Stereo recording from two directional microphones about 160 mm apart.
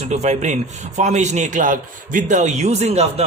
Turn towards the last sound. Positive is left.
turn(degrees=-40)  # may be behind; listen again after turning